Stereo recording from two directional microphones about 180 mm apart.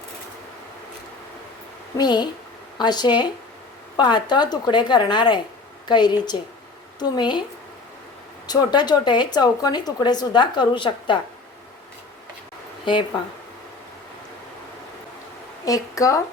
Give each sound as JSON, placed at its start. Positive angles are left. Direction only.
{"t": 2.0, "sound": "speech", "side_deg": 25}
{"t": 8.4, "sound": "speech", "side_deg": 25}
{"t": 12.8, "sound": "speech", "side_deg": 25}
{"t": 15.6, "sound": "speech", "side_deg": 20}